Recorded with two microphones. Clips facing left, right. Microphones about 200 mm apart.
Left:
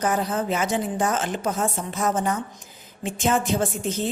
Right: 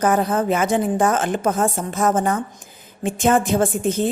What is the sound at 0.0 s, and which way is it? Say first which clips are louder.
A woman's voice: right 5 dB; 55° right (ahead or behind).